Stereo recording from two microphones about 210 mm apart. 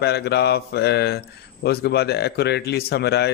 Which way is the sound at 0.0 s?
50° left (ahead or behind).